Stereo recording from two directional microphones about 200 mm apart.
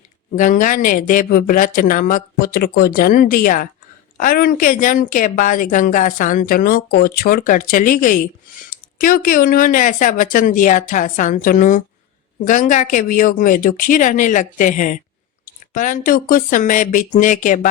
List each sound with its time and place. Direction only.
0.3 s a woman's voice: 40° left (ahead or behind)